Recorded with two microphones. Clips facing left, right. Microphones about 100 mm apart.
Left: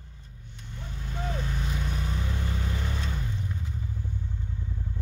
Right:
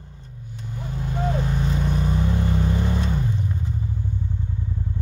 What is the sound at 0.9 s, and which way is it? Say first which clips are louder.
Vehicle: right 9 dB; 40° right (ahead or behind).